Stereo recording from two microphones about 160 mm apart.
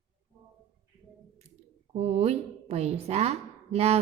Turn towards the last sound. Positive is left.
turn(degrees=-40)  # may be behind; listen again after turning